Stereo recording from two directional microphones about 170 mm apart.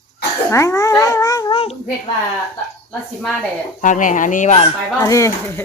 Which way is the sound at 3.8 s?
50° left (ahead or behind).